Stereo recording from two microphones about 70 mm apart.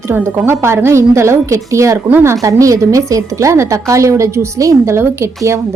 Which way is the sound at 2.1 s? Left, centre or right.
Right.